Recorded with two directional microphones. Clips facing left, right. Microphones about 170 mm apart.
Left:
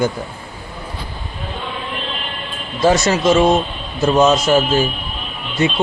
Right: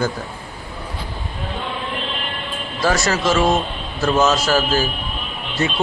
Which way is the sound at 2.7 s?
20° left (ahead or behind).